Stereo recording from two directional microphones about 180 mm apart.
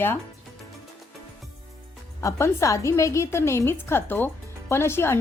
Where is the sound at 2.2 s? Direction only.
15° left (ahead or behind).